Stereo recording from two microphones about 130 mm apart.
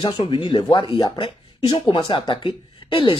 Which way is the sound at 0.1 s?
45° left (ahead or behind).